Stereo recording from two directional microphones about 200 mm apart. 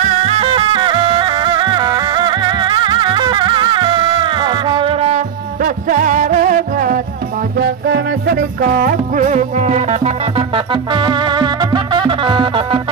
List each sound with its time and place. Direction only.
0.0 s music: 30° right (ahead or behind)